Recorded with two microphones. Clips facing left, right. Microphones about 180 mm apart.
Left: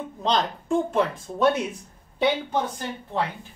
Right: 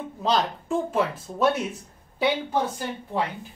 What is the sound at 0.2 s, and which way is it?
Speech, 5° right (ahead or behind).